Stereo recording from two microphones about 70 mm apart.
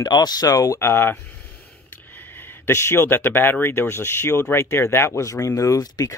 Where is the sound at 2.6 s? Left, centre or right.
Left.